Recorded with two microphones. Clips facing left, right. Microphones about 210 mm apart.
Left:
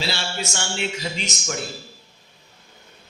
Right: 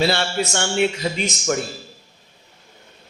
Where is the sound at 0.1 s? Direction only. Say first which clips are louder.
Right 7 dB; 60° right (ahead or behind).